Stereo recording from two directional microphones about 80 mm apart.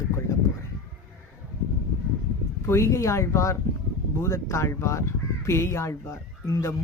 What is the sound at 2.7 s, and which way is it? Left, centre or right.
Speech, left.